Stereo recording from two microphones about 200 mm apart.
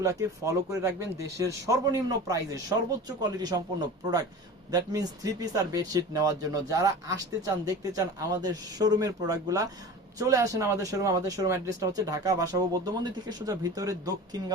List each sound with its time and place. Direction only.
0.0 s speech: 15° right (ahead or behind)